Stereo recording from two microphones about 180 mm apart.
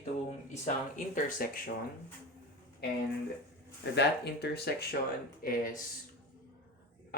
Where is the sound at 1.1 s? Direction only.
50° left (ahead or behind).